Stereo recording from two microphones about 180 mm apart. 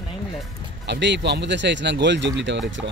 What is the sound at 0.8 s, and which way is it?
Speech, 75° right (ahead or behind).